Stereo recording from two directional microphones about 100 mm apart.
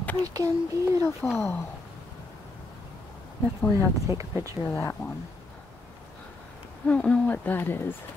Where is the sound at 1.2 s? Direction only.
15° left (ahead or behind).